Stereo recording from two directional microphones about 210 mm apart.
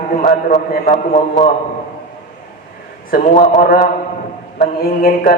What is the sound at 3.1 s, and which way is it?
A man's voice, 40° left (ahead or behind).